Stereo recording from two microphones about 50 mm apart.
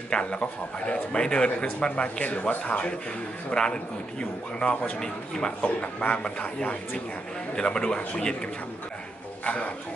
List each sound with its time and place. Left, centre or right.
0.1 s a man's voice: centre
5.6 s a man's voice: left